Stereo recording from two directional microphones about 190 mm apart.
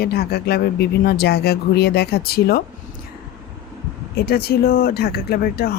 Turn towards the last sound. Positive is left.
turn(degrees=55)  # may be behind; listen again after turning